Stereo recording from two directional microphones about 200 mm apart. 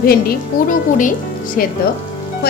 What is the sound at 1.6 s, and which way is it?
Speech, 45° left (ahead or behind).